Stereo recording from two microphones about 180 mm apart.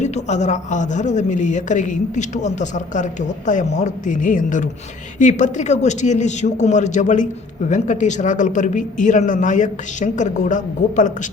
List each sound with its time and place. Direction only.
0.0 s a man's voice: 40° left (ahead or behind)